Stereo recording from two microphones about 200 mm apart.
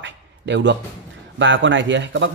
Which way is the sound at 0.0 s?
60° right (ahead or behind).